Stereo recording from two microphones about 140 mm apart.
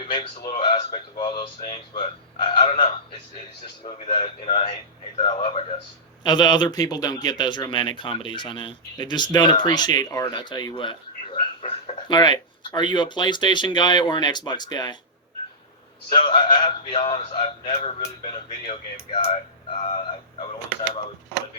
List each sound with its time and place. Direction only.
0.1 s a man's voice: 35° left (ahead or behind)
6.2 s speech: 30° left (ahead or behind)
16.2 s speech: 40° left (ahead or behind)